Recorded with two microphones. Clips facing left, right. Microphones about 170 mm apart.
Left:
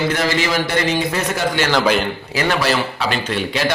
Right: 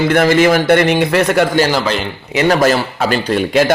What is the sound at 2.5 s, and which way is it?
A man's voice, 45° right (ahead or behind).